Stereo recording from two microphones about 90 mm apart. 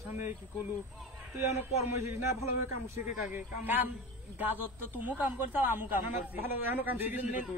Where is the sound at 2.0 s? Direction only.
30° right (ahead or behind).